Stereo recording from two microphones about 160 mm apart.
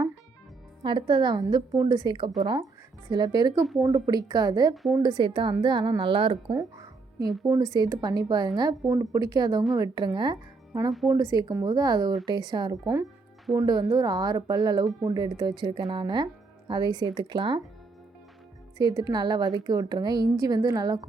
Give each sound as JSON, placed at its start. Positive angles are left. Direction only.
{"t": 0.8, "sound": "speech", "side_deg": -30}
{"t": 4.7, "sound": "a woman's voice", "side_deg": 0}
{"t": 4.9, "sound": "speech", "side_deg": -25}
{"t": 7.4, "sound": "speech", "side_deg": -20}
{"t": 18.8, "sound": "speech", "side_deg": -25}